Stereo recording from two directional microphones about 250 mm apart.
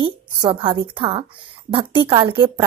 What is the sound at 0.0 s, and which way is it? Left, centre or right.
A woman's voice, centre.